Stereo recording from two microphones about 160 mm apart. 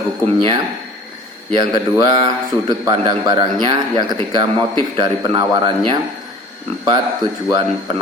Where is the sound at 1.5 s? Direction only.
30° right (ahead or behind).